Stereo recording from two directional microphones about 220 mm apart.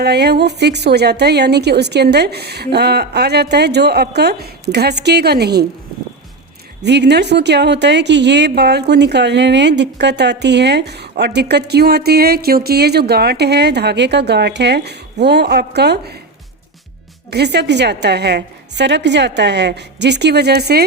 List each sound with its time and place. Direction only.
0.0 s a woman's voice: 50° right (ahead or behind)
6.8 s a woman's voice: 50° right (ahead or behind)
17.3 s a woman's voice: 50° right (ahead or behind)